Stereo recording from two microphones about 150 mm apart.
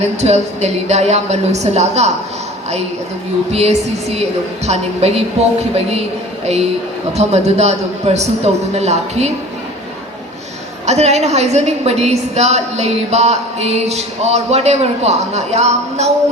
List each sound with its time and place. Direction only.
0.0 s a woman's voice: 45° right (ahead or behind)
3.5 s a woman's voice: 45° right (ahead or behind)
10.8 s a woman's voice: 45° right (ahead or behind)